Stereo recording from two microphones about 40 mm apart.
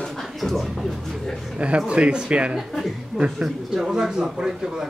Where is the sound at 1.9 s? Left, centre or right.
Right.